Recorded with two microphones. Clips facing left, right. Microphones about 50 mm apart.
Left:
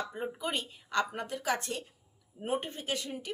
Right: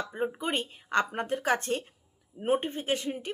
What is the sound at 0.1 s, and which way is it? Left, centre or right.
A woman's voice, right.